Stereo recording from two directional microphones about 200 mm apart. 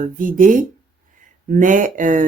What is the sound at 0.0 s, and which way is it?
Speech, 40° right (ahead or behind).